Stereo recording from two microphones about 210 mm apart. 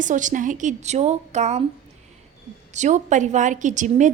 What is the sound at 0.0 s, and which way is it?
A woman's voice, 35° right (ahead or behind).